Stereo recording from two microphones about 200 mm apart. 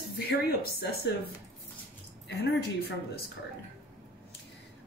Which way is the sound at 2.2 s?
55° left (ahead or behind).